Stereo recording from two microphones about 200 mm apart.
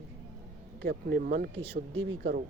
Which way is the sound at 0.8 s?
55° right (ahead or behind).